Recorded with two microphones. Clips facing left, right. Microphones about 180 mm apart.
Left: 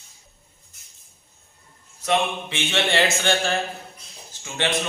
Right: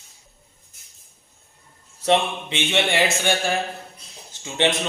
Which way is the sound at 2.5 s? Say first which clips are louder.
Right 3 dB; 15° right (ahead or behind).